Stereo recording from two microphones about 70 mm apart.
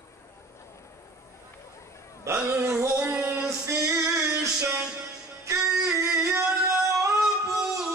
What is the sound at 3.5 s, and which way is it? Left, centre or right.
Music, right.